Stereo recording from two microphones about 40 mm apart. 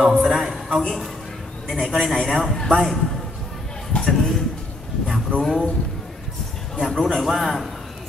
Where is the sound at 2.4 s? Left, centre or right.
Centre.